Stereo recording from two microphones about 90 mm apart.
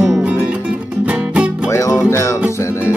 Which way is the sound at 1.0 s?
15° right (ahead or behind).